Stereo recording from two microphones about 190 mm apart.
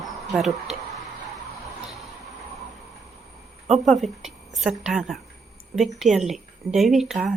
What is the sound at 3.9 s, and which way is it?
Speech, centre (ahead or behind).